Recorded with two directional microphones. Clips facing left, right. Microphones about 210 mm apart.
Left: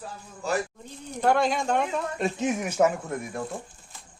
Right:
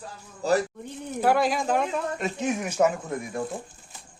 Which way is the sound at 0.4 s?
35° right (ahead or behind).